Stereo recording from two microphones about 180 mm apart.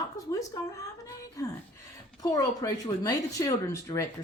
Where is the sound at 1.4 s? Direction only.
20° left (ahead or behind).